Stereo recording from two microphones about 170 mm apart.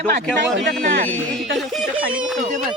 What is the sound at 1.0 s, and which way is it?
Speech, 10° left (ahead or behind).